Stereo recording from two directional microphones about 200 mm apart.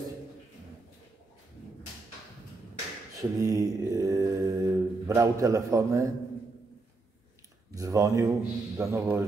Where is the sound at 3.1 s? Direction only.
15° right (ahead or behind).